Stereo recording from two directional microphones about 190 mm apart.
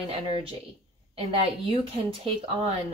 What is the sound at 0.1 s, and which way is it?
Speech, 30° right (ahead or behind).